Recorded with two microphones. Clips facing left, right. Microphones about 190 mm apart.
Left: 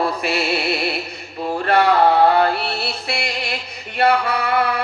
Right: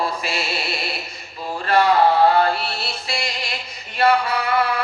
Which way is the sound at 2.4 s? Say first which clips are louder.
Left 2 dB; 60° left (ahead or behind).